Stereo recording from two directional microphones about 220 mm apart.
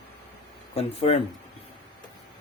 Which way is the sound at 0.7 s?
25° left (ahead or behind).